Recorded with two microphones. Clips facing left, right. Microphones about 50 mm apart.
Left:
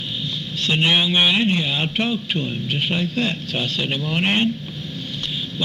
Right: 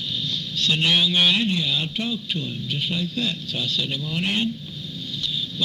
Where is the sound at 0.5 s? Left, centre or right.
Left.